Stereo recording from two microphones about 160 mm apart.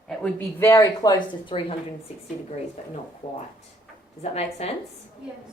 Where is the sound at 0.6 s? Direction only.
20° left (ahead or behind).